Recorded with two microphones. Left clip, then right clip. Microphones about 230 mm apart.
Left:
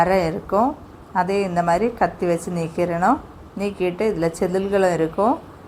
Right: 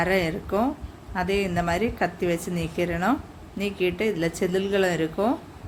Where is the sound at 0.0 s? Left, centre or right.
Centre.